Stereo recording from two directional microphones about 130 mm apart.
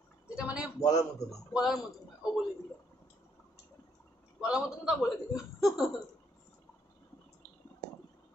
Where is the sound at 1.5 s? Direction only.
5° right (ahead or behind).